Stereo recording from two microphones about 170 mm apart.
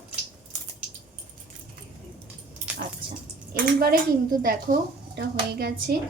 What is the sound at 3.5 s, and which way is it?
Speech, 60° right (ahead or behind).